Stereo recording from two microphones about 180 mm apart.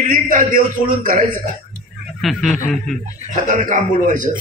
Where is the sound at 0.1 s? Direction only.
50° right (ahead or behind).